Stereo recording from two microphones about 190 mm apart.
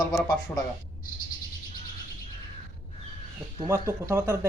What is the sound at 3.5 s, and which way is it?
Speech, 15° right (ahead or behind).